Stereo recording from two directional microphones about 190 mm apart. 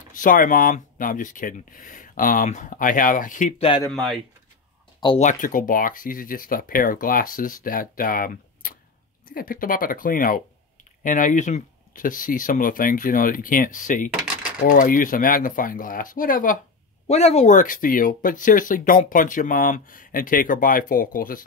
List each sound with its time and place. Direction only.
0.1 s speech: 45° left (ahead or behind)
3.9 s speech: centre (ahead or behind)
5.0 s speech: 35° left (ahead or behind)
17.1 s speech: 35° left (ahead or behind)